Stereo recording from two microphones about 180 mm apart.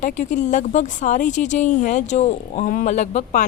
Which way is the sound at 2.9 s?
40° left (ahead or behind).